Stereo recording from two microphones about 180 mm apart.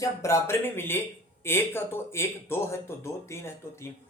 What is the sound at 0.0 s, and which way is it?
Speech, 15° left (ahead or behind).